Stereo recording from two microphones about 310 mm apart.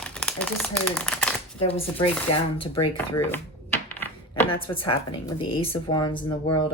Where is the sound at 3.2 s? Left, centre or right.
Centre.